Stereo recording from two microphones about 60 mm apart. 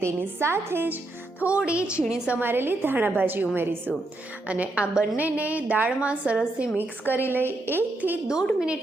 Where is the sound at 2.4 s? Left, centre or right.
Right.